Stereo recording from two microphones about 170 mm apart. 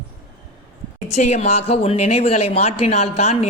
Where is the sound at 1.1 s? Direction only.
40° left (ahead or behind).